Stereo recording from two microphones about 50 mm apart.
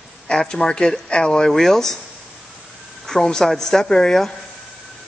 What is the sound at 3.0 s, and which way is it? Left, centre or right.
Speech, centre.